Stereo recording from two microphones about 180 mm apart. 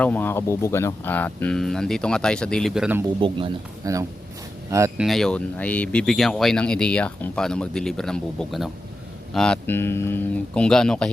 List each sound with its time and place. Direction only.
0.0 s speech: 10° left (ahead or behind); by 3.1 s 5° right (ahead or behind)
3.2 s speech: 30° right (ahead or behind)
4.9 s speech: centre (ahead or behind)